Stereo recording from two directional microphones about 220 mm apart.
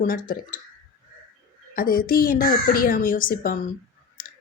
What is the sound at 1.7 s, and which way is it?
A woman's voice, 40° left (ahead or behind).